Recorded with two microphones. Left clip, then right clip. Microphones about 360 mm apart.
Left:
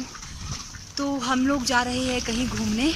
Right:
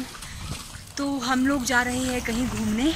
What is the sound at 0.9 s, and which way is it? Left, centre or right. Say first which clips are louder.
Speech: even; centre.